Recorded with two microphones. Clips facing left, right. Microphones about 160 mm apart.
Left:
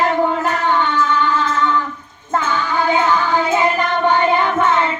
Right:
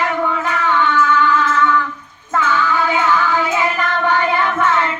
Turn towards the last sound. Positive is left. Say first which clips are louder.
# left 1 dB
turn(degrees=20)  # may be behind; listen again after turning